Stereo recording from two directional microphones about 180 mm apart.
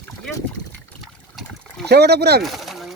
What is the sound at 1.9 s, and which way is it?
Speech, 65° right (ahead or behind).